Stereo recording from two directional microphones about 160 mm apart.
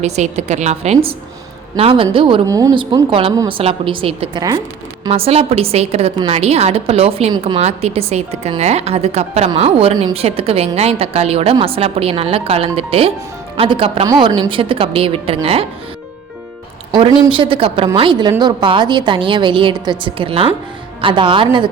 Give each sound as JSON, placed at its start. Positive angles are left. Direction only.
{"t": 0.0, "sound": "a woman's voice", "side_deg": -45}
{"t": 16.9, "sound": "a woman's voice", "side_deg": -30}